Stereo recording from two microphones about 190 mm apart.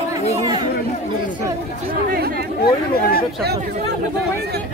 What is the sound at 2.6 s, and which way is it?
Chatter, 50° left (ahead or behind).